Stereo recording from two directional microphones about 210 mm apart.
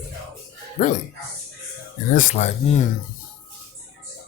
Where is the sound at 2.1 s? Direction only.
35° left (ahead or behind).